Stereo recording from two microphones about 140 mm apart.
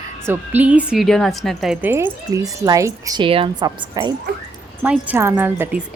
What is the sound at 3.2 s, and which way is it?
Speech, 40° right (ahead or behind).